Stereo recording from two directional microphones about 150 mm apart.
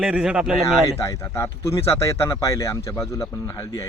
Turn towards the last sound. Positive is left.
turn(degrees=20)  # may be behind; listen again after turning